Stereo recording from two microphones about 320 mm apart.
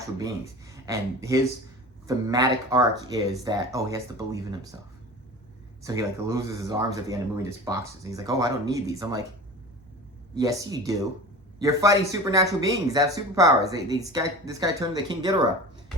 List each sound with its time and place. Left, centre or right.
0.0 s speech: centre
5.8 s speech: centre
10.3 s speech: centre